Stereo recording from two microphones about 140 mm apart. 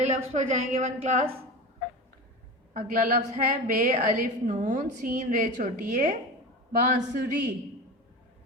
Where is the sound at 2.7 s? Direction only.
75° right (ahead or behind).